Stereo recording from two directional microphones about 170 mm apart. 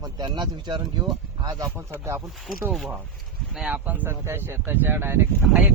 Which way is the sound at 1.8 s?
15° right (ahead or behind).